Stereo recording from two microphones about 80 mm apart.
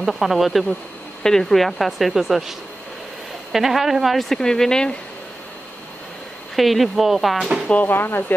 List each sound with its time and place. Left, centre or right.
0.0 s speech: centre
3.5 s speech: centre
6.5 s speech: centre
7.6 s speech: centre